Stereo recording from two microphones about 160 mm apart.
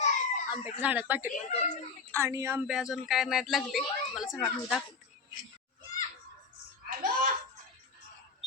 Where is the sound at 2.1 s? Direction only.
15° right (ahead or behind).